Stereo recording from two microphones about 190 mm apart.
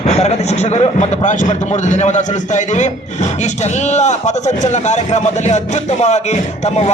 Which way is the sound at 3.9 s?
35° left (ahead or behind).